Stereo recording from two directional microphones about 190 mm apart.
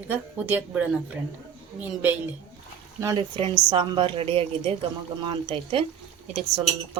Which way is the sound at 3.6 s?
25° right (ahead or behind).